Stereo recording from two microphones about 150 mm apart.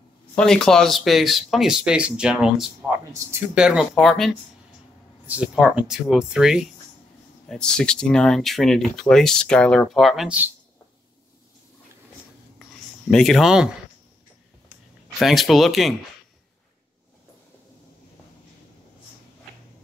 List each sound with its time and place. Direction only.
0.4 s speech: 5° left (ahead or behind)
3.1 s speech: 15° right (ahead or behind)
3.5 s speech: 5° right (ahead or behind)
13.1 s speech: centre (ahead or behind)
15.1 s speech: centre (ahead or behind)